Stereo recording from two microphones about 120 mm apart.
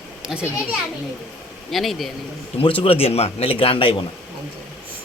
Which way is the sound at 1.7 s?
Centre (ahead or behind).